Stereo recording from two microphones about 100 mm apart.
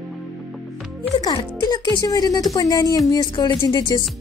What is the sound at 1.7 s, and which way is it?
Speech, 40° left (ahead or behind).